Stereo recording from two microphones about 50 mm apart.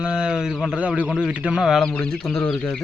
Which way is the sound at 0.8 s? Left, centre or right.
Right.